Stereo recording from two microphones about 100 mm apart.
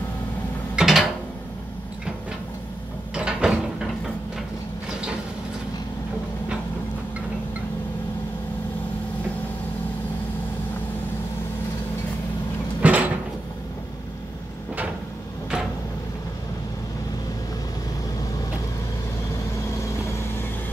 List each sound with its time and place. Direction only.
0.7 s mechanisms: centre (ahead or behind)
3.2 s mechanisms: 10° right (ahead or behind)
12.8 s mechanisms: 15° right (ahead or behind)